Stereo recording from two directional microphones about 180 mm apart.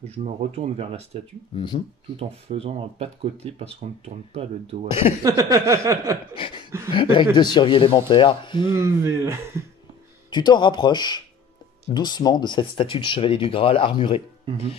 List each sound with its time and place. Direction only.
0.2 s speech: 35° right (ahead or behind)
1.5 s speech: 25° left (ahead or behind)
2.1 s speech: 30° right (ahead or behind)
5.2 s a sound: 15° right (ahead or behind)
6.9 s speech: 25° left (ahead or behind)
8.7 s a sound: 15° right (ahead or behind)
10.3 s speech: 25° left (ahead or behind)